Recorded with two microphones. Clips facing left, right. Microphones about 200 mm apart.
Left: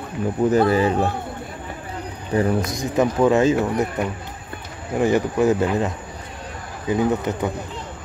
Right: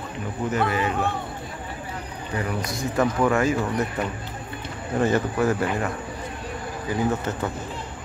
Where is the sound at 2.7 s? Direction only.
15° left (ahead or behind).